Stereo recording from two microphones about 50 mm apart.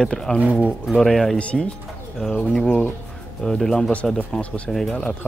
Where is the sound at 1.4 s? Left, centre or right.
Left.